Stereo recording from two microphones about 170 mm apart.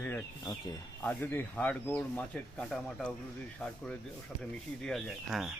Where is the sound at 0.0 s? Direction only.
10° left (ahead or behind).